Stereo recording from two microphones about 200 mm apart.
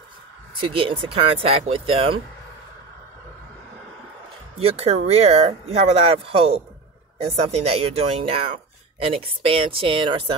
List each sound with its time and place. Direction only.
0.6 s speech: 25° right (ahead or behind)
4.6 s speech: 30° right (ahead or behind)